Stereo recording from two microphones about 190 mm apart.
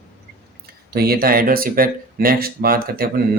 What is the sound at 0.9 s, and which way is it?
Speech, 55° right (ahead or behind).